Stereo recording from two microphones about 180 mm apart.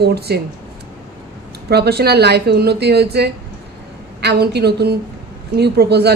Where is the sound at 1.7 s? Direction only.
65° right (ahead or behind).